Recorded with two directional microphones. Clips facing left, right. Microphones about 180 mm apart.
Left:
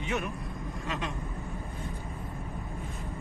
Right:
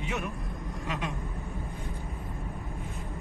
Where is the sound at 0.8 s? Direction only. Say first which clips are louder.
Right 1 dB; 15° right (ahead or behind).